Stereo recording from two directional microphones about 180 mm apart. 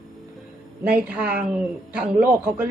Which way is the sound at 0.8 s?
5° right (ahead or behind).